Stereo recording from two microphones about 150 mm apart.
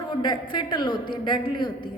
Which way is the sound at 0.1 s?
30° left (ahead or behind).